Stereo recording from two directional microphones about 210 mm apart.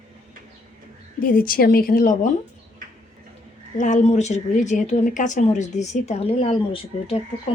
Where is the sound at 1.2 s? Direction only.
40° left (ahead or behind).